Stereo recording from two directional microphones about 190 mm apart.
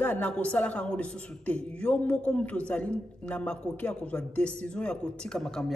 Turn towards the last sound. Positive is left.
turn(degrees=5)  # may be behind; listen again after turning